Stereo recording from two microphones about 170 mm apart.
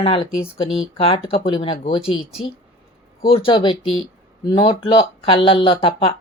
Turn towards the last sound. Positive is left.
turn(degrees=30)  # may be behind; listen again after turning